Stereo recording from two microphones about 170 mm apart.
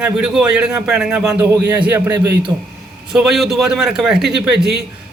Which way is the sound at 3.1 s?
Centre (ahead or behind).